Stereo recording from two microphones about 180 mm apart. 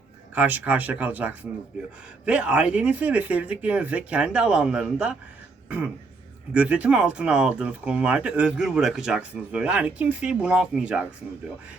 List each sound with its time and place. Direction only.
0.3 s speech: 10° right (ahead or behind)
5.6 s throat clearing: 10° right (ahead or behind)
6.5 s speech: 5° right (ahead or behind)